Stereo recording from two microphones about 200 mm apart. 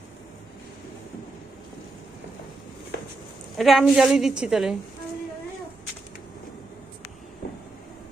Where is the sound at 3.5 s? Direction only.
Centre (ahead or behind).